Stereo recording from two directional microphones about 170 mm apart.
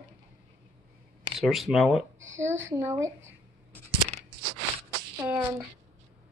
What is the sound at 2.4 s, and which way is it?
Speech, 15° right (ahead or behind).